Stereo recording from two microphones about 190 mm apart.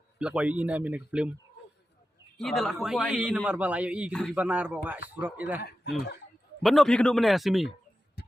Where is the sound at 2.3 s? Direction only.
Centre (ahead or behind).